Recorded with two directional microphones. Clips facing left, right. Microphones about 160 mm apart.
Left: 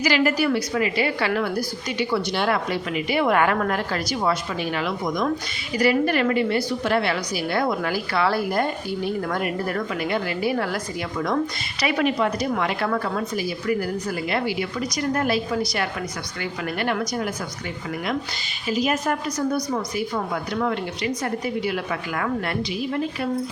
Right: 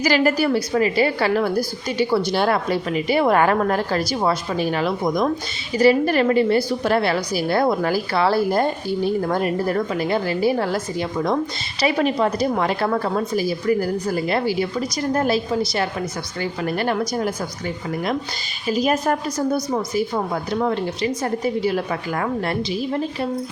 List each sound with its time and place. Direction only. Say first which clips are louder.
0.0 s a woman's voice: right 2 dB; 35° right (ahead or behind)
11.8 s a woman's voice: right 3 dB; 30° right (ahead or behind)
18.7 s a woman's voice: right 3 dB; 35° right (ahead or behind)